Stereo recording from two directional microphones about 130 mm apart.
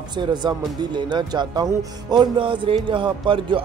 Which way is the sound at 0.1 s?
35° right (ahead or behind).